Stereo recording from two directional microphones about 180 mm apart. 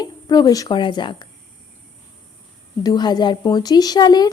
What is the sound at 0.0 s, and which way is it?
A woman's voice, 20° left (ahead or behind).